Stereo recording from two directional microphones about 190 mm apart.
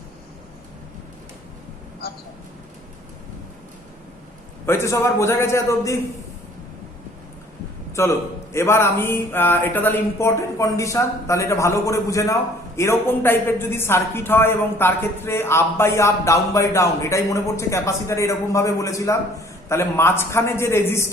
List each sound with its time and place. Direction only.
4.6 s speech: 15° left (ahead or behind)
8.0 s speech: 15° left (ahead or behind)